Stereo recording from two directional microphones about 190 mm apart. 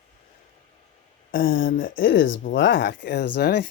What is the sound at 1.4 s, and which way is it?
Speech, 80° left.